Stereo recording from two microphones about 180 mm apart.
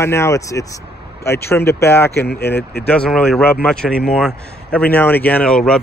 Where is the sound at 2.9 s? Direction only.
5° left (ahead or behind).